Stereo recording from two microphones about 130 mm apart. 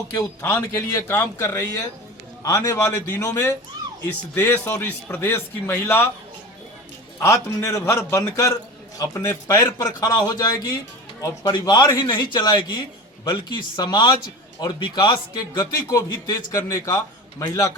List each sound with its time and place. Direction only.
0.1 s a man's voice: 25° left (ahead or behind)
7.2 s a man's voice: 25° left (ahead or behind)